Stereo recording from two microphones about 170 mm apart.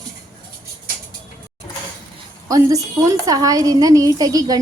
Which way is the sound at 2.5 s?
20° right (ahead or behind).